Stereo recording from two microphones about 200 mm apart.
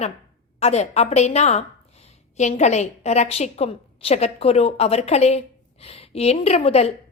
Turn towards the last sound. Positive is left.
turn(degrees=30)  # may be behind; listen again after turning